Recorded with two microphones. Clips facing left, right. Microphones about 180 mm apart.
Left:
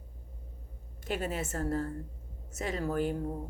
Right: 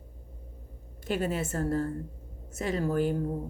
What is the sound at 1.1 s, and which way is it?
Speech, 30° right (ahead or behind).